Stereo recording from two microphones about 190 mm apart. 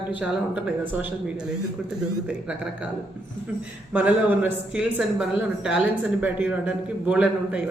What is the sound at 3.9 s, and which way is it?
Speech, 5° right (ahead or behind).